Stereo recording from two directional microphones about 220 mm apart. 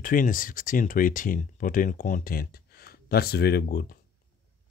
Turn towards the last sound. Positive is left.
turn(degrees=45)  # may be behind; listen again after turning